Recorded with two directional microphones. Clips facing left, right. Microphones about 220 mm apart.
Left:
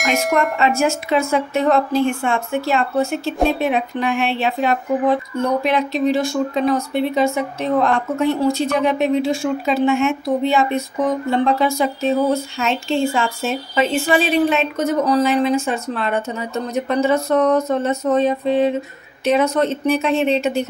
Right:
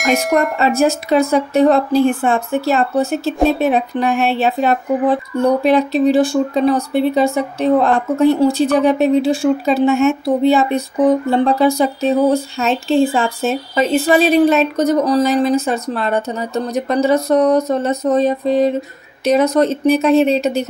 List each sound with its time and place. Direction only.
0.0 s speech: centre (ahead or behind)
0.6 s a woman's voice: 35° right (ahead or behind)